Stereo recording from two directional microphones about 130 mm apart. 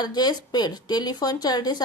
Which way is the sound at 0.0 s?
30° left (ahead or behind).